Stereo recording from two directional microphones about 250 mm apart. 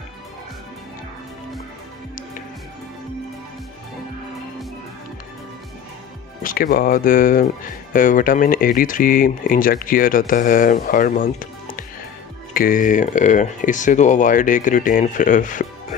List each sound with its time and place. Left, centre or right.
6.4 s speech: left